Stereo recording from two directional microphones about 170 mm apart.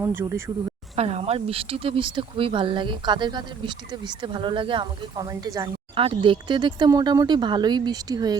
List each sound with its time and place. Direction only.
0.0 s speech: 15° right (ahead or behind)
0.9 s speech: 35° right (ahead or behind); by 5.7 s 20° right (ahead or behind)
5.9 s speech: 30° right (ahead or behind)